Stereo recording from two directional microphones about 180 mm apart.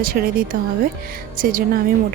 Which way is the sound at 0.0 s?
55° right (ahead or behind).